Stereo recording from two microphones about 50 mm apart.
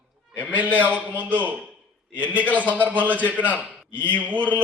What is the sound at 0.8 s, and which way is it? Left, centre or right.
Speech, right.